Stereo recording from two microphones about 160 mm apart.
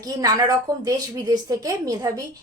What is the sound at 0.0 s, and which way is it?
A woman's voice, 20° right (ahead or behind).